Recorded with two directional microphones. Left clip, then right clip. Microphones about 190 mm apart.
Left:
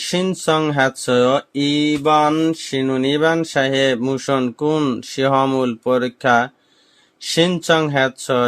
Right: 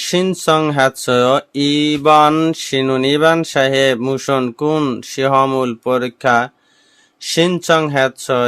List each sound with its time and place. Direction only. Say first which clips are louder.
0.0 s speech: right 4 dB; 20° right (ahead or behind)